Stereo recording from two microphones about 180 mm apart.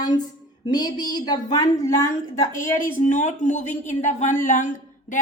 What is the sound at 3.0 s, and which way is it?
A woman's voice, 45° left (ahead or behind).